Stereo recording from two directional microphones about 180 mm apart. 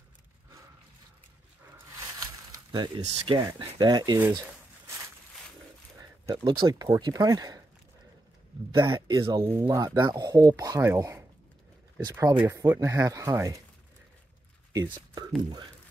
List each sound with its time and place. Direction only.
2.7 s speech: 25° right (ahead or behind)
6.2 s speech: 25° right (ahead or behind)
8.9 s speech: 25° right (ahead or behind)
15.0 s speech: 20° right (ahead or behind)